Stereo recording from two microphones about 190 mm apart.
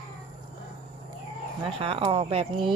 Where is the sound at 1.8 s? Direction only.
30° right (ahead or behind).